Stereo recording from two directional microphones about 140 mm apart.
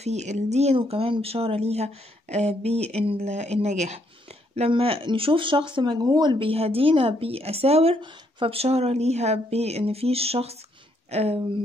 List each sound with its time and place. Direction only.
0.0 s speech: 55° right (ahead or behind)